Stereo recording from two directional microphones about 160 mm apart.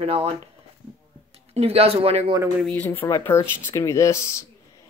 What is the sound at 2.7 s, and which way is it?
Speech, 10° left (ahead or behind).